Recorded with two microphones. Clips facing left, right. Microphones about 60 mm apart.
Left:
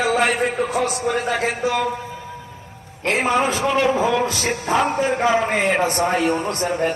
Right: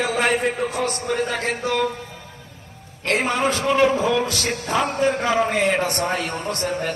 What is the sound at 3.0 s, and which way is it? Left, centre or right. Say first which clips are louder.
A man's voice: left 2 dB; left.